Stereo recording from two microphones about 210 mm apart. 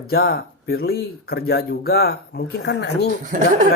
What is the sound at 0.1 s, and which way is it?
Speech, 45° left (ahead or behind).